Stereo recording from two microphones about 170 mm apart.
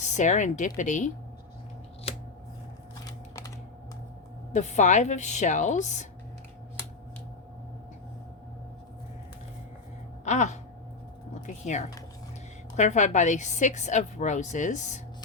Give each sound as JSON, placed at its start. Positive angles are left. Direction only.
{"t": 0.0, "sound": "a woman's voice", "side_deg": 45}
{"t": 2.1, "sound": "scissors", "side_deg": 35}
{"t": 3.0, "sound": "typewriter", "side_deg": 20}
{"t": 4.5, "sound": "a woman's voice", "side_deg": 45}
{"t": 10.2, "sound": "a woman's voice", "side_deg": 45}